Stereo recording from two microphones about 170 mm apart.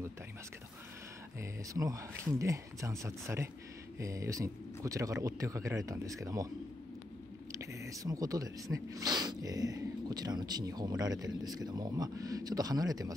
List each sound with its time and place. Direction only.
1.4 s speech: 20° right (ahead or behind)
7.5 s a sound: 20° right (ahead or behind)
8.7 s speech: 20° right (ahead or behind)